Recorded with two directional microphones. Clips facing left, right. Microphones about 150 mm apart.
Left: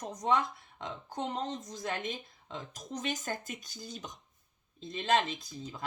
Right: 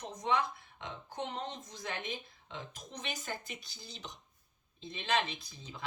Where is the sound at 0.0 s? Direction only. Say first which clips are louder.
Left 3 dB; 45° left (ahead or behind).